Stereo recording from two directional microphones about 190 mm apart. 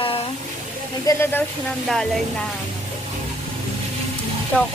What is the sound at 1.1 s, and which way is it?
A woman's voice, 10° left (ahead or behind).